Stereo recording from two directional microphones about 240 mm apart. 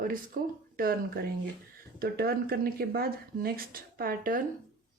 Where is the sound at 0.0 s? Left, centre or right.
Right.